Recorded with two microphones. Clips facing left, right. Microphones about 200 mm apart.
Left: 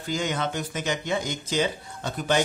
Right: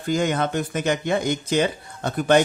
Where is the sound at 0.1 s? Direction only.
55° right (ahead or behind).